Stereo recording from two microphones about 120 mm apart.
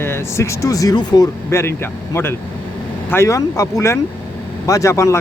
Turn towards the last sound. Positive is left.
turn(degrees=25)  # may be behind; listen again after turning